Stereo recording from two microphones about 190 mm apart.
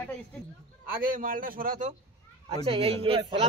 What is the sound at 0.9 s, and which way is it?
A man's voice, 50° right (ahead or behind).